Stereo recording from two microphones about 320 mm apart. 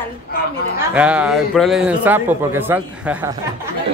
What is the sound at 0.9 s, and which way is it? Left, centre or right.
Speech, centre.